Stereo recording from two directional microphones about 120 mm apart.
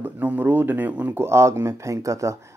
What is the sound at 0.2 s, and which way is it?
Speech, 15° right (ahead or behind).